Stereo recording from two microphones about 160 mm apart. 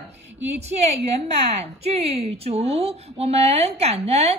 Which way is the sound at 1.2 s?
40° right (ahead or behind).